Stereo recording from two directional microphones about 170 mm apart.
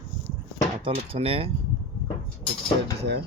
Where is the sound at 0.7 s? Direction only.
35° right (ahead or behind).